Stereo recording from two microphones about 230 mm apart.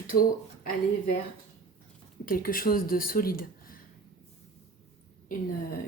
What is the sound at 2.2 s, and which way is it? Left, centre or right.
Speech, left.